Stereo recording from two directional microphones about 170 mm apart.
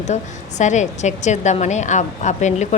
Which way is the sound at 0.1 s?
45° left (ahead or behind).